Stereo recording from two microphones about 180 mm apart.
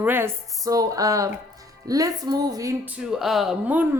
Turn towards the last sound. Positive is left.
turn(degrees=-10)  # may be behind; listen again after turning